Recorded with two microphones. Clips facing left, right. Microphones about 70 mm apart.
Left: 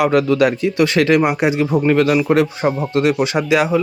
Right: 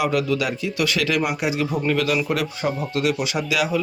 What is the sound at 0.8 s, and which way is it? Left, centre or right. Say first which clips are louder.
Speech: left 8 dB; left.